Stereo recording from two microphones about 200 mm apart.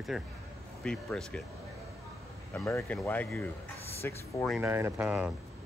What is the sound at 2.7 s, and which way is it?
Speech, 15° left (ahead or behind).